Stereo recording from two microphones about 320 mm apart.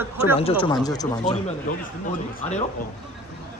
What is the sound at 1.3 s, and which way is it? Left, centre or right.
Speech, centre.